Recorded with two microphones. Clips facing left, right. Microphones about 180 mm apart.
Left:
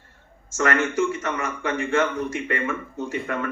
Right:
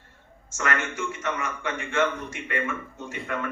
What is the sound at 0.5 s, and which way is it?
Speech, 40° left (ahead or behind).